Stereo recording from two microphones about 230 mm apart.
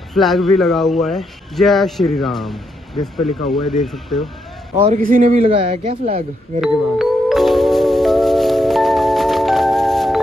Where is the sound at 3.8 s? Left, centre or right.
Centre.